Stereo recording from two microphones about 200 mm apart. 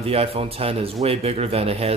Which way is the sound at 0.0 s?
30° right (ahead or behind).